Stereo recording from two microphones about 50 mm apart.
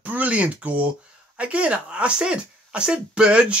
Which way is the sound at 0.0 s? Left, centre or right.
Right.